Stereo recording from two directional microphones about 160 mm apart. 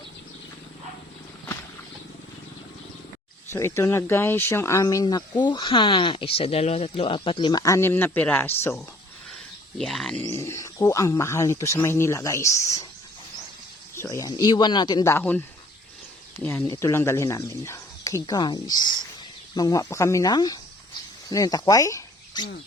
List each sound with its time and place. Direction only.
3.5 s speech: 15° left (ahead or behind)
9.3 s a sound: centre (ahead or behind)
10.2 s speech: 15° left (ahead or behind)
13.9 s speech: 20° left (ahead or behind)
15.1 s speech: 10° left (ahead or behind)